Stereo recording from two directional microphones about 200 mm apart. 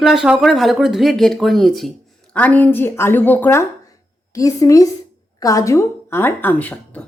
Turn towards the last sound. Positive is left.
turn(degrees=5)  # may be behind; listen again after turning